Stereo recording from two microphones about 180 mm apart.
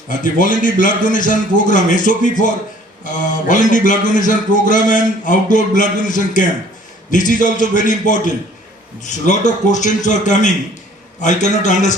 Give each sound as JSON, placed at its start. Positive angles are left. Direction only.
{"t": 0.2, "sound": "a man's voice", "side_deg": 50}